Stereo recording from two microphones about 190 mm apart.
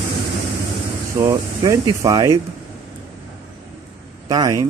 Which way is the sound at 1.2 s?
20° right (ahead or behind).